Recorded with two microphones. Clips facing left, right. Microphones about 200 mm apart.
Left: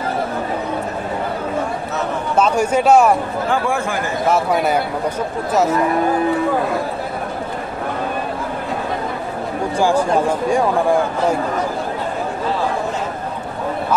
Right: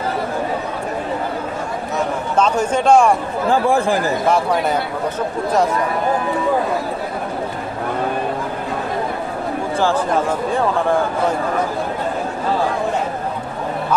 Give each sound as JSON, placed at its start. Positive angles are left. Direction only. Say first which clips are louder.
{"t": 2.3, "sound": "a man's voice", "louder": "left 1 dB", "side_deg": 10}
{"t": 3.4, "sound": "speech", "louder": "right 6 dB", "side_deg": -35}